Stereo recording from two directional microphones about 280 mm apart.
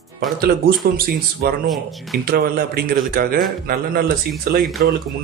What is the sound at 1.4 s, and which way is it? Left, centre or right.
Speech, right.